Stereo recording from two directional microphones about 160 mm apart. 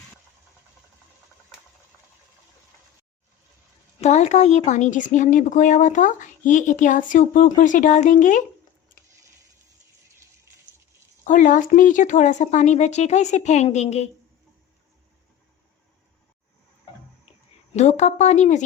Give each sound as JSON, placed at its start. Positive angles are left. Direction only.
{"t": 4.0, "sound": "speech", "side_deg": 45}
{"t": 11.2, "sound": "speech", "side_deg": 55}
{"t": 17.7, "sound": "speech", "side_deg": 45}